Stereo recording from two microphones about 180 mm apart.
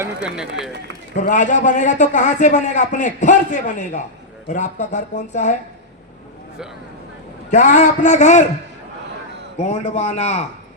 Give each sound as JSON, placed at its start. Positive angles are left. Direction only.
{"t": 0.0, "sound": "run", "side_deg": -5}
{"t": 1.1, "sound": "a man's voice", "side_deg": 45}
{"t": 7.5, "sound": "speech", "side_deg": 40}
{"t": 9.6, "sound": "speech", "side_deg": 40}